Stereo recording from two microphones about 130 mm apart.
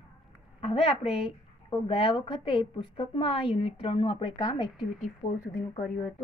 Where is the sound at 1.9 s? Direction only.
45° left (ahead or behind).